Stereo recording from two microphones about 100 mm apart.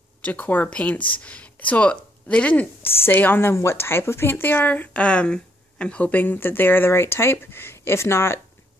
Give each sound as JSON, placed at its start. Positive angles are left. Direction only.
{"t": 0.2, "sound": "a woman's voice", "side_deg": 15}